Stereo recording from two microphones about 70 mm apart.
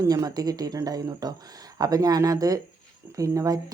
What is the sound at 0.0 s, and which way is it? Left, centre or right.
A woman's voice, right.